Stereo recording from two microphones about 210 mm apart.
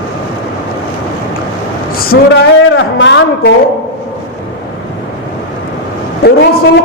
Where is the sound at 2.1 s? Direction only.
55° left (ahead or behind).